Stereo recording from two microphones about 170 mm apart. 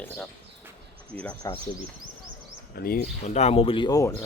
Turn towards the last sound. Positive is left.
turn(degrees=20)  # may be behind; listen again after turning